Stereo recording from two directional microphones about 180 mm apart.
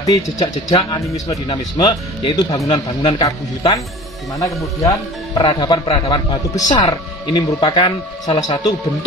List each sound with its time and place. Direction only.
0.0 s speech: 20° left (ahead or behind)
2.7 s speech: 30° left (ahead or behind)
4.4 s speech: 20° left (ahead or behind)